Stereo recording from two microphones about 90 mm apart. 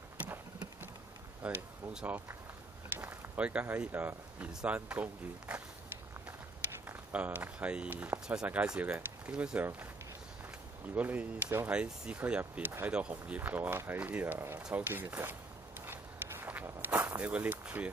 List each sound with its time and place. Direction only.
1.4 s speech: 15° right (ahead or behind)
3.3 s speech: 15° right (ahead or behind)
6.9 s speech: 15° right (ahead or behind)
11.0 s speech: 20° right (ahead or behind)
15.8 s walk: 25° right (ahead or behind)